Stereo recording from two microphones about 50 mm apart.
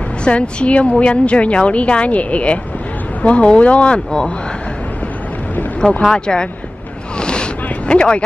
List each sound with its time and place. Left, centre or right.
0.2 s a woman's voice: left
5.9 s speech: centre
7.2 s boat: centre